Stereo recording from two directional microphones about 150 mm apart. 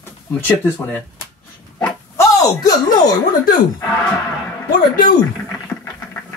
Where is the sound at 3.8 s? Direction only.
10° left (ahead or behind).